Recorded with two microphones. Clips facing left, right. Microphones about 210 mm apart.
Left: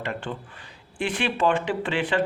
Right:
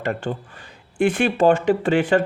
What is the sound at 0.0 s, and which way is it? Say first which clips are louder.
Speech: right 6 dB; 45° right (ahead or behind).